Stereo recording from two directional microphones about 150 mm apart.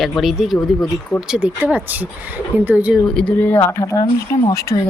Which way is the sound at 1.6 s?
10° right (ahead or behind).